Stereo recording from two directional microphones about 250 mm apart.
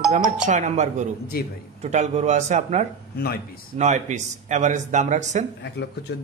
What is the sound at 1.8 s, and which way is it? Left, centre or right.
Speech, right.